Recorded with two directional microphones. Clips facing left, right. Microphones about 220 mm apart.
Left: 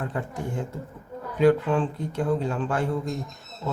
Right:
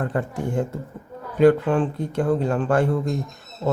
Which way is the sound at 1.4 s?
50° right (ahead or behind).